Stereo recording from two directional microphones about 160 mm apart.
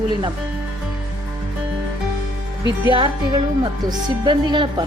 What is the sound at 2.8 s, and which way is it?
A woman's voice, 30° right (ahead or behind).